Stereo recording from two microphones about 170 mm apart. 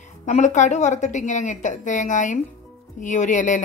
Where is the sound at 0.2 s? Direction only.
45° left (ahead or behind).